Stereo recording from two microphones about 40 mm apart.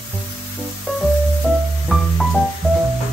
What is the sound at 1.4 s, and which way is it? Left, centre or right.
Music, right.